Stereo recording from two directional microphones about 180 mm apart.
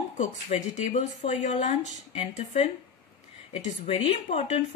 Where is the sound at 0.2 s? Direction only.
40° left (ahead or behind).